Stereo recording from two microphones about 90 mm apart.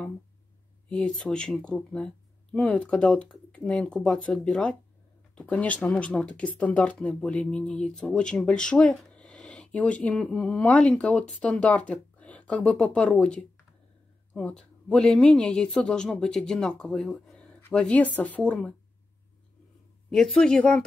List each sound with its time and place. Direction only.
0.8 s speech: 10° left (ahead or behind)
20.1 s speech: 5° left (ahead or behind)